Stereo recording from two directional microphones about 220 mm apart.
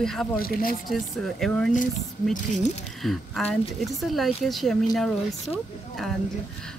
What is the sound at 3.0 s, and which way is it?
A woman's voice, centre (ahead or behind).